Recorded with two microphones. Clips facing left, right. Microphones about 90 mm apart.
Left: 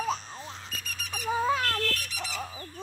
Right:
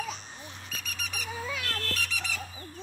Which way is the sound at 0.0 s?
35° left (ahead or behind).